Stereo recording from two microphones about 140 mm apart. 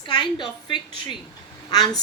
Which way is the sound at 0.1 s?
30° left (ahead or behind).